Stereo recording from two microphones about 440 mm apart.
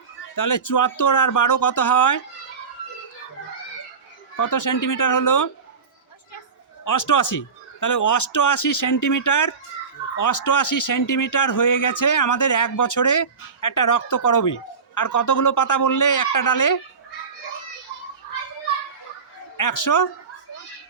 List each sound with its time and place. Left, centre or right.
0.3 s speech: left
4.4 s speech: left
6.8 s speech: left
19.5 s speech: left